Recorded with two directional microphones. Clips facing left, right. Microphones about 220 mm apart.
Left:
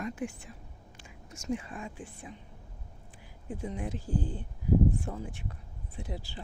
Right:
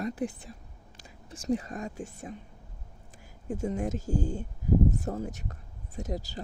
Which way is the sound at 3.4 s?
45° right (ahead or behind).